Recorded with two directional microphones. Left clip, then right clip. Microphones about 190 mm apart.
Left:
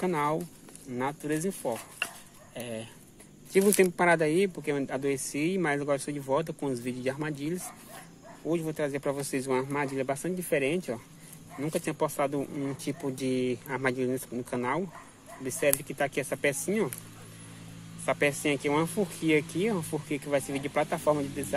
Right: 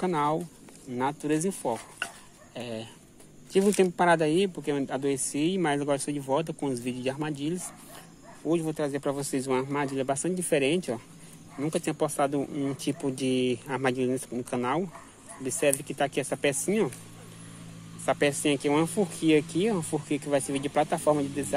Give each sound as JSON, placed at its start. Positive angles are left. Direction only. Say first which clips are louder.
{"t": 0.0, "sound": "speech", "louder": "right 2 dB", "side_deg": -10}
{"t": 3.5, "sound": "speech", "louder": "even", "side_deg": 0}
{"t": 18.0, "sound": "speech", "louder": "right 2 dB", "side_deg": -15}